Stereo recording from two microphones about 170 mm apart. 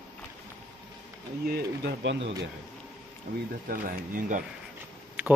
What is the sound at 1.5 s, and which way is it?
Speech, 70° right (ahead or behind).